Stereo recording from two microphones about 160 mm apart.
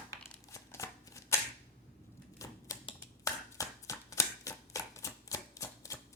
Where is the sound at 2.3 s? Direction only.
20° left (ahead or behind).